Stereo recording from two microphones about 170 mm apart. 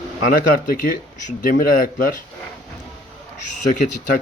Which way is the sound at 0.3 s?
55° left (ahead or behind).